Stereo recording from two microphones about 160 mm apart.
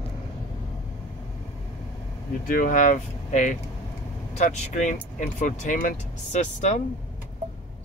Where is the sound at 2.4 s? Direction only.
60° left (ahead or behind); by 6.8 s 45° left (ahead or behind).